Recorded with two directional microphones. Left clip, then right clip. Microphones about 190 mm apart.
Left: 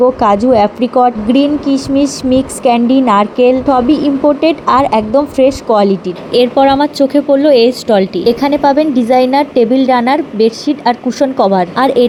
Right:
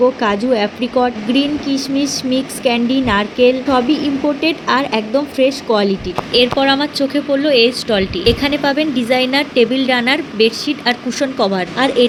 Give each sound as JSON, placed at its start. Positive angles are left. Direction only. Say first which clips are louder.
{"t": 0.2, "sound": "speech", "louder": "left 7 dB", "side_deg": 25}
{"t": 6.3, "sound": "speech", "louder": "left 5 dB", "side_deg": 35}